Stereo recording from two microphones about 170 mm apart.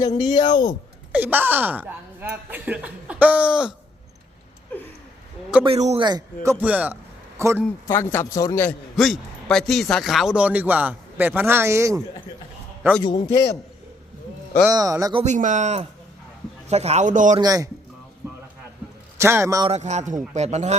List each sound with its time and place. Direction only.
0.2 s speech: 25° left (ahead or behind)
1.1 s a man's voice: 10° right (ahead or behind)
5.6 s speech: 35° right (ahead or behind)
6.0 s a man's voice: 25° right (ahead or behind)
7.9 s a man's voice: 15° left (ahead or behind)
9.0 s a man's voice: centre (ahead or behind); by 12.0 s 20° right (ahead or behind)
13.0 s speech: 25° left (ahead or behind)
14.7 s speech: 20° right (ahead or behind)
15.2 s speech: 45° right (ahead or behind)
17.3 s speech: 20° right (ahead or behind)
19.1 s a man's voice: 15° right (ahead or behind)
19.6 s speech: 40° right (ahead or behind)